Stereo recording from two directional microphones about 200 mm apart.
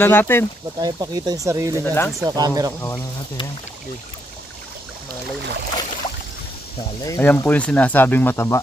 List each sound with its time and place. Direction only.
0.0 s speech: 10° left (ahead or behind)
0.7 s speech: 20° right (ahead or behind)
1.9 s speech: 10° left (ahead or behind)
2.1 s speech: 20° right (ahead or behind)
2.8 s speech: 15° left (ahead or behind)
7.0 s speech: 15° left (ahead or behind)